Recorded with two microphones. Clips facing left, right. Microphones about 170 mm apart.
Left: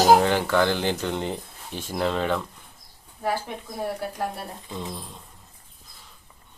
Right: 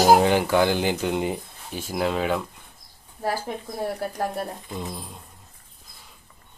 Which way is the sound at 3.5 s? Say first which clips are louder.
Right 2 dB; 40° right (ahead or behind).